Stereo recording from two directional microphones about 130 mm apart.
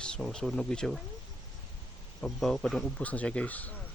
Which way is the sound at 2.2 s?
5° left (ahead or behind).